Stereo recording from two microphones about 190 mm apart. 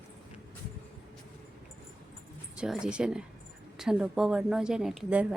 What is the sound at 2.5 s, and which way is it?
A woman's voice, 5° right (ahead or behind).